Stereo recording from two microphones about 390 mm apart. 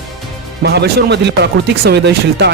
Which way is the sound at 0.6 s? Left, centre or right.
Right.